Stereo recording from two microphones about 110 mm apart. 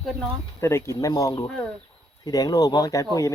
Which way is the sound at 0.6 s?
25° left (ahead or behind).